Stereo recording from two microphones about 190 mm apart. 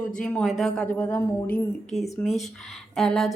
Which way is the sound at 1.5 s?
35° left (ahead or behind).